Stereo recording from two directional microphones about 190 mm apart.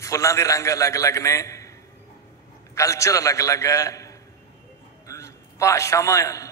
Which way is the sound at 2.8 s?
15° left (ahead or behind).